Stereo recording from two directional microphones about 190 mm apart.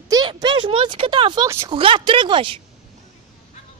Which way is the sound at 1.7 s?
25° right (ahead or behind).